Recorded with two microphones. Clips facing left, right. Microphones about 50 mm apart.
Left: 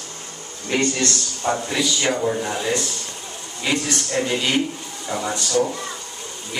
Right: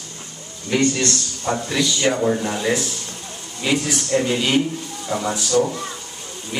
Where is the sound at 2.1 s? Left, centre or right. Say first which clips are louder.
Right 2 dB; centre.